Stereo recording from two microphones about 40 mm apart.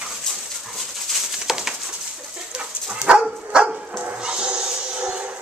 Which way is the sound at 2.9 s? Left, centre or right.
Right.